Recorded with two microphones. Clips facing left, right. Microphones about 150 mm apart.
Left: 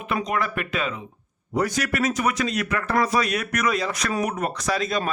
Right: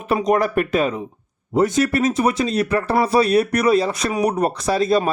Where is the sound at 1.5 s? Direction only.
25° right (ahead or behind).